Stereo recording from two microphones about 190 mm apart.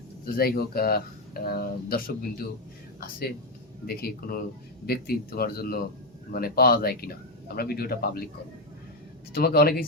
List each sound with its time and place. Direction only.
0.3 s speech: 55° left (ahead or behind)
9.3 s speech: 55° left (ahead or behind)